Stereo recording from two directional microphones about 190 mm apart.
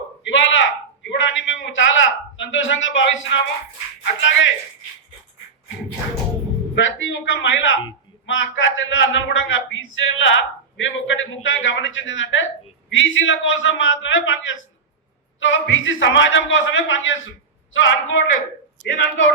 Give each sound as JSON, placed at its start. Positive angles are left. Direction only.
{"t": 0.3, "sound": "a sound", "side_deg": 80}
{"t": 4.0, "sound": "a man's voice", "side_deg": 80}
{"t": 6.7, "sound": "a man's voice", "side_deg": 80}
{"t": 18.8, "sound": "a man's voice", "side_deg": 75}